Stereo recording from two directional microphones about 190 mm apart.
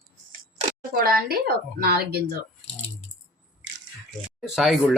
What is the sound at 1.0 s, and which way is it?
A woman's voice, 50° right (ahead or behind).